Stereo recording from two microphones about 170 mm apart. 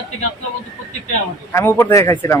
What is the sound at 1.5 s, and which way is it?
Speech, 15° left (ahead or behind).